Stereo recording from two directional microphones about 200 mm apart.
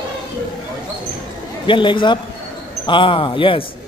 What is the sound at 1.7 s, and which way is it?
A man's voice, 25° left (ahead or behind).